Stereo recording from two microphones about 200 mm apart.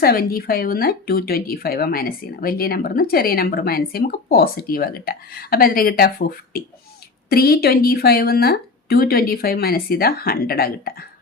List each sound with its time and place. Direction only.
0.0 s speech: 50° left (ahead or behind)